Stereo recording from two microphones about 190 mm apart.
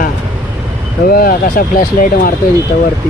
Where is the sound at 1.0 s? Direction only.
50° left (ahead or behind).